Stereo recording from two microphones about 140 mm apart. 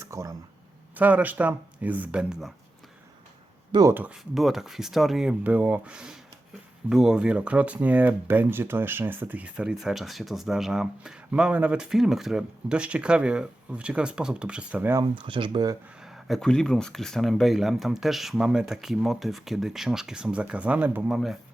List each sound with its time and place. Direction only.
0.0 s a sound: 20° right (ahead or behind)
0.9 s speech: 10° right (ahead or behind)
3.7 s speech: 30° right (ahead or behind)
3.9 s speech: 10° right (ahead or behind)
15.1 s speech: 35° right (ahead or behind)
16.0 s speech: centre (ahead or behind)